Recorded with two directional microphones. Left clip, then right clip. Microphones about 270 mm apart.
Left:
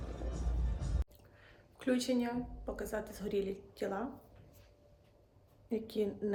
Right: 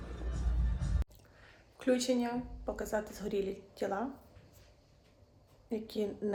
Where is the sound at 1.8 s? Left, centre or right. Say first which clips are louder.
Right 3 dB; centre.